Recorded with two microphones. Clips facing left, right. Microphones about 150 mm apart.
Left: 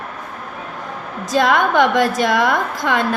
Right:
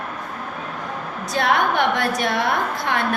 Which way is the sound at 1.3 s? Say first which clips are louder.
Left 4 dB; 90° left.